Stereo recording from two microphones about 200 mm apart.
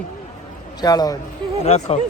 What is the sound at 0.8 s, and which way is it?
Speech, 20° left (ahead or behind).